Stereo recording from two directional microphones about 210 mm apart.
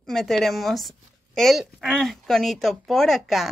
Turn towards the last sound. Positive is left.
turn(degrees=0)  # may be behind; listen again after turning